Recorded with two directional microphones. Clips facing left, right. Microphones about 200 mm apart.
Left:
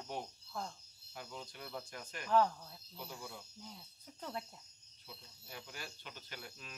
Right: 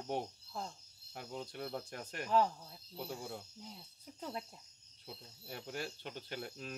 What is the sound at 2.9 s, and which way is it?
Speech, 45° right (ahead or behind).